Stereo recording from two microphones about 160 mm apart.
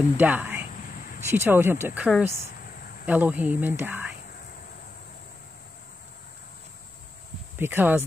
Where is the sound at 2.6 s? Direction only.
60° left (ahead or behind).